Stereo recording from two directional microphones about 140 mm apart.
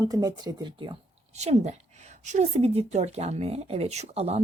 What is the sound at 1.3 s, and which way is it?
A woman's voice, 55° right (ahead or behind).